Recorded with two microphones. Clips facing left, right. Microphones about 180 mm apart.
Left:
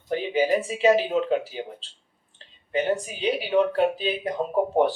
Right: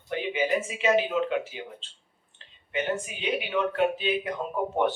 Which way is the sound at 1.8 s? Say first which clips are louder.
Left 1 dB; 35° left (ahead or behind).